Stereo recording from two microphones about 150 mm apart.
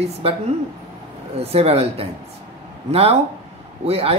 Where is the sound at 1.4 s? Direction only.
40° right (ahead or behind).